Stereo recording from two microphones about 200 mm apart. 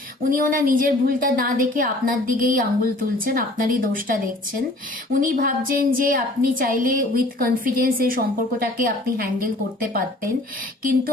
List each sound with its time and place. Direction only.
0.3 s a woman's voice: 45° right (ahead or behind)